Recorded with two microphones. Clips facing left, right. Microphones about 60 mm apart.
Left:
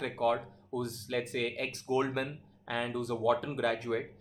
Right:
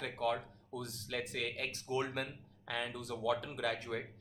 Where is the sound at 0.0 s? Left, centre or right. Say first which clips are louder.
Left 6 dB; left.